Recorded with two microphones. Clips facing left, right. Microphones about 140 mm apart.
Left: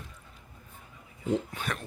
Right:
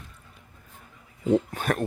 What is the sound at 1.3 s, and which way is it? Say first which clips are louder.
Speech: right 7 dB; 50° right (ahead or behind).